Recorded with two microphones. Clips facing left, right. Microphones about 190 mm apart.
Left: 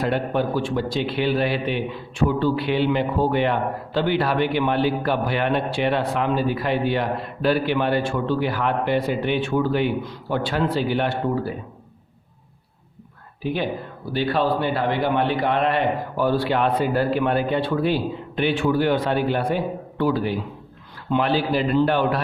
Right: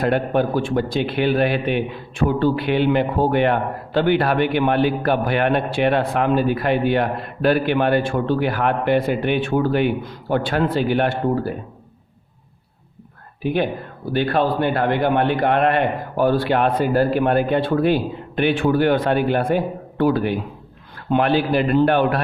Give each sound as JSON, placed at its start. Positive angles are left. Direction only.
{"t": 0.0, "sound": "a man's voice", "side_deg": -55}
{"t": 13.4, "sound": "a man's voice", "side_deg": -55}